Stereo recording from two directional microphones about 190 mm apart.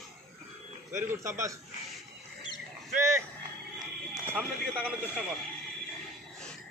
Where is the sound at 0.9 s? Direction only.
15° right (ahead or behind).